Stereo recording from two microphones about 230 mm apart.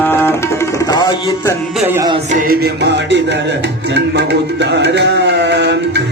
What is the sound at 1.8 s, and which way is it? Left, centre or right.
Music, centre.